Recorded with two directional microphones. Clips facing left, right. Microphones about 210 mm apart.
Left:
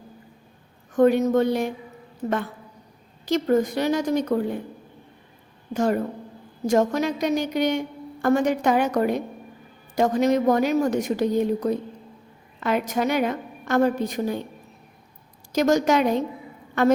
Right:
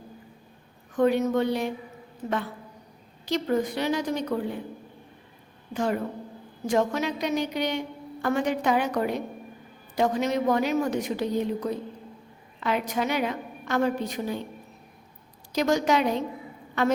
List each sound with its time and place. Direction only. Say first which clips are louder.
0.9 s a woman's voice: left 4 dB; 45° left (ahead or behind)
5.7 s a woman's voice: left 4 dB; 45° left (ahead or behind)
15.5 s a woman's voice: left 4 dB; 45° left (ahead or behind)